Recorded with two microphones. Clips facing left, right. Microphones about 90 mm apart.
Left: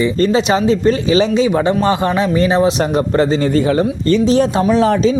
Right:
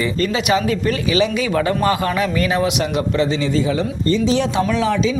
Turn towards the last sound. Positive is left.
turn(degrees=45)  # may be behind; listen again after turning